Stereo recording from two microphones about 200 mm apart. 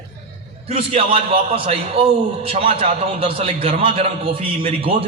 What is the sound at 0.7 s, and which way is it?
A man's voice, 30° right (ahead or behind).